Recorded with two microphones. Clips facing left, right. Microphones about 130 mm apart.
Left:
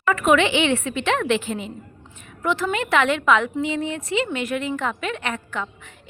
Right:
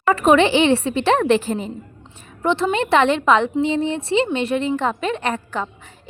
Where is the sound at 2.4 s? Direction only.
25° right (ahead or behind).